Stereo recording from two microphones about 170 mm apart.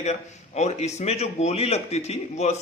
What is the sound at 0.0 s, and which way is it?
Speech, 40° left (ahead or behind).